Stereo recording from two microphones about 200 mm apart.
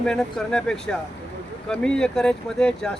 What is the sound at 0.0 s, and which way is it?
Speech, 5° left (ahead or behind).